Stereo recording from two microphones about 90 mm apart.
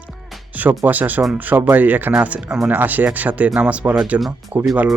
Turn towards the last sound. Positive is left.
turn(degrees=-20)  # may be behind; listen again after turning